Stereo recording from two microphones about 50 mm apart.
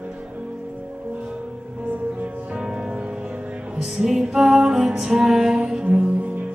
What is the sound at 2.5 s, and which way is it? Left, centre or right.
Music, centre.